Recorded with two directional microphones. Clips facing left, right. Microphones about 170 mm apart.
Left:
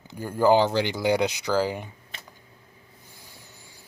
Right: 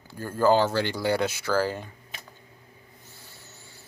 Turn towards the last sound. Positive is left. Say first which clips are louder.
# even
turn(degrees=15)  # may be behind; listen again after turning